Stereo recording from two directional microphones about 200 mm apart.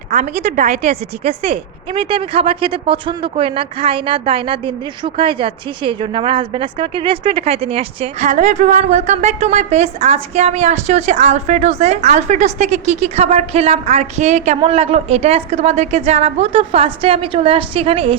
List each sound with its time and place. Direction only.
0.1 s a woman's voice: 40° right (ahead or behind)
0.8 s a woman's voice: 30° right (ahead or behind)